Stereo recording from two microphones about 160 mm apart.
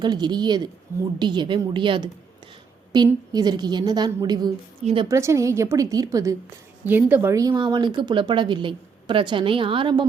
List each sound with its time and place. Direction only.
0.0 s speech: 25° right (ahead or behind)